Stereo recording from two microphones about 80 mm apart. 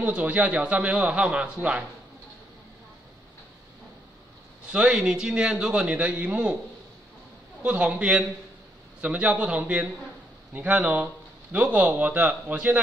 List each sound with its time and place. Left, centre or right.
0.0 s a man's voice: centre
4.6 s a man's voice: centre
7.6 s a man's voice: centre